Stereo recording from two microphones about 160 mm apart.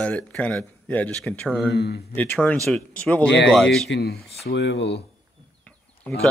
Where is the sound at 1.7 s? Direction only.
90° left.